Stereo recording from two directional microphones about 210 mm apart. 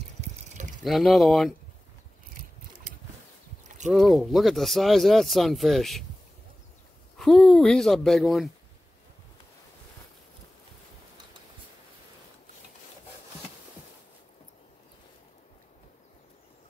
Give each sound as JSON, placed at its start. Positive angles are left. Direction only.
{"t": 0.2, "sound": "mechanisms", "side_deg": -35}
{"t": 0.8, "sound": "speech", "side_deg": 0}
{"t": 3.8, "sound": "speech", "side_deg": 0}
{"t": 7.2, "sound": "speech", "side_deg": 5}